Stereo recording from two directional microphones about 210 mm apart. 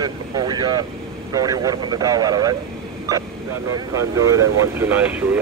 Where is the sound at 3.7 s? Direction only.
15° right (ahead or behind).